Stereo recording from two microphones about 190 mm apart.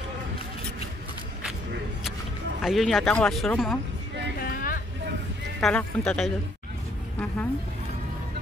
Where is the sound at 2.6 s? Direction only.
Centre (ahead or behind).